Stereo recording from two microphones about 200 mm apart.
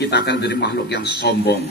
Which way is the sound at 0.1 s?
55° left (ahead or behind).